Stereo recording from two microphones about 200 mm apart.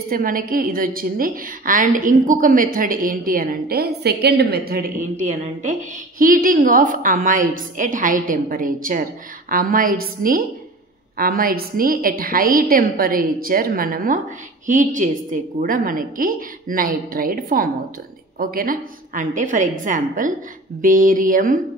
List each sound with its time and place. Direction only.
0.1 s a woman's voice: 45° right (ahead or behind)